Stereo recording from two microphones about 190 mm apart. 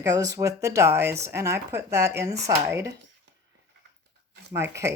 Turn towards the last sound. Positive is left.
turn(degrees=-15)  # may be behind; listen again after turning